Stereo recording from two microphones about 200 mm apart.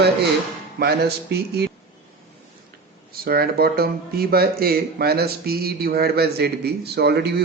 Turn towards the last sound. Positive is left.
turn(degrees=-55)  # may be behind; listen again after turning